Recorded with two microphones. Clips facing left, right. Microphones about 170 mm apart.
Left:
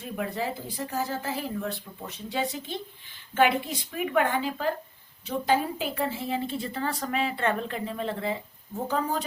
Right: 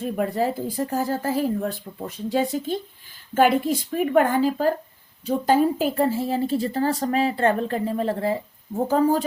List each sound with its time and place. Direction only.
0.0 s a woman's voice: 45° right (ahead or behind)